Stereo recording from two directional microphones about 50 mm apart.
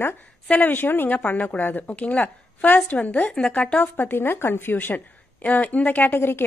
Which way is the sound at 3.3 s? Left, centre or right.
Centre.